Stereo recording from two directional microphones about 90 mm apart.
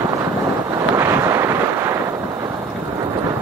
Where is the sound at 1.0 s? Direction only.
30° right (ahead or behind).